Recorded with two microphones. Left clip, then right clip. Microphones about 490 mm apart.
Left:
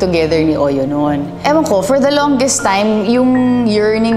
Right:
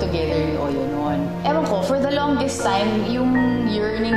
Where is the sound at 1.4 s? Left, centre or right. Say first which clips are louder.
Left 9 dB; left.